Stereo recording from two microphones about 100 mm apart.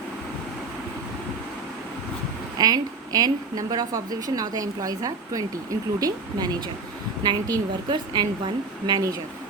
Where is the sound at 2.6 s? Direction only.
40° right (ahead or behind).